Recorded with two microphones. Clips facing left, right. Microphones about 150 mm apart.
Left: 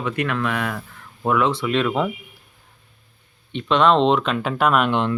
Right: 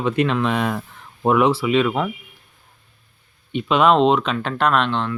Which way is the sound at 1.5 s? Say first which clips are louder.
Right 3 dB; 5° right (ahead or behind).